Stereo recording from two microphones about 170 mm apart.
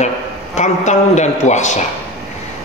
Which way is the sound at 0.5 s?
45° left (ahead or behind).